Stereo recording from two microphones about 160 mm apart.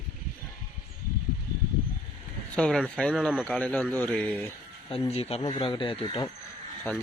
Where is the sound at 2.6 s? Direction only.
5° left (ahead or behind).